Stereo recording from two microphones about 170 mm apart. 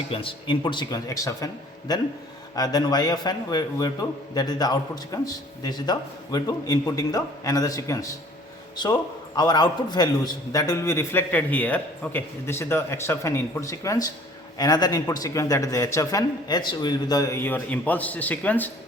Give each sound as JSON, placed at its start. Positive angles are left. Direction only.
{"t": 0.1, "sound": "a man's voice", "side_deg": 30}
{"t": 2.6, "sound": "a man's voice", "side_deg": 25}